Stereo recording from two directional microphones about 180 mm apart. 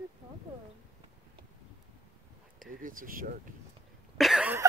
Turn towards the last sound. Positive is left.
turn(degrees=0)  # may be behind; listen again after turning